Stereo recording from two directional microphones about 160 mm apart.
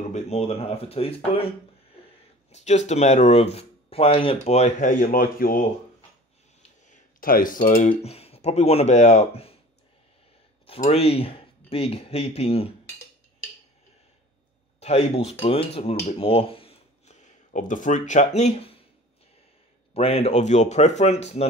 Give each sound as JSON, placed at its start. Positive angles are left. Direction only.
{"t": 0.1, "sound": "speech", "side_deg": 40}
{"t": 2.5, "sound": "speech", "side_deg": 45}
{"t": 6.6, "sound": "a sound", "side_deg": 55}
{"t": 8.0, "sound": "speech", "side_deg": 40}
{"t": 10.7, "sound": "speech", "side_deg": 40}
{"t": 14.8, "sound": "speech", "side_deg": 40}
{"t": 17.5, "sound": "speech", "side_deg": 55}
{"t": 19.9, "sound": "speech", "side_deg": 40}